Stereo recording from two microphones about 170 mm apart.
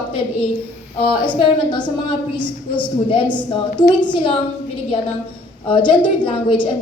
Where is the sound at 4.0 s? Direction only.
25° left (ahead or behind).